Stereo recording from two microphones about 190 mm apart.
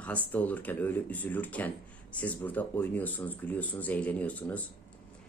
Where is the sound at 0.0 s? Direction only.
5° left (ahead or behind).